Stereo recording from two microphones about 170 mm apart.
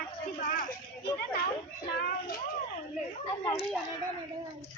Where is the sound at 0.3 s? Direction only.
50° left (ahead or behind).